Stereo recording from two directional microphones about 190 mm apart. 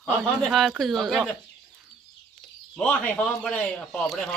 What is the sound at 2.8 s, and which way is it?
Speech, 5° left (ahead or behind).